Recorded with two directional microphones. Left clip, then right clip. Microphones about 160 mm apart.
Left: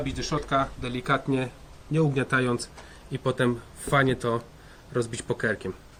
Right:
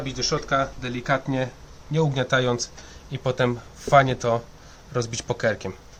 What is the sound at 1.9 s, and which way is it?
A man's voice, 50° right (ahead or behind).